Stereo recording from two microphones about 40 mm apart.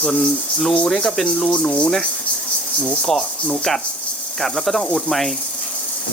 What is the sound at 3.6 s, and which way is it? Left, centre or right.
Speech, centre.